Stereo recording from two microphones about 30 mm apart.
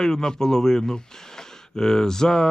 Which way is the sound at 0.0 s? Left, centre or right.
Left.